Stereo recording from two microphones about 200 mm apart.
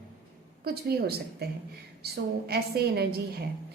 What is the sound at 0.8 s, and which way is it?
A woman's voice, 50° right (ahead or behind).